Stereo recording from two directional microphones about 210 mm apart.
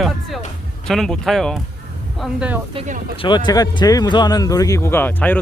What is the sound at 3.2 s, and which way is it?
Speech, 20° left (ahead or behind).